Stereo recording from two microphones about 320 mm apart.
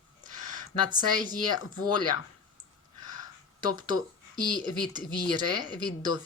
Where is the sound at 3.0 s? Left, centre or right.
Centre.